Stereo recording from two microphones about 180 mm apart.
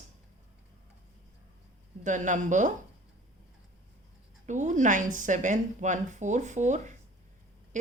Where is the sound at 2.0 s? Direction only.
45° right (ahead or behind).